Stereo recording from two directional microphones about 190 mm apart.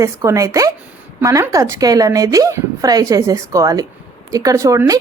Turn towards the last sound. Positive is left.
turn(degrees=-15)  # may be behind; listen again after turning